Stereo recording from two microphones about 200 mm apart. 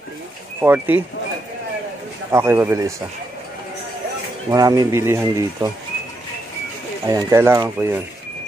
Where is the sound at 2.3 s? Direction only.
15° right (ahead or behind).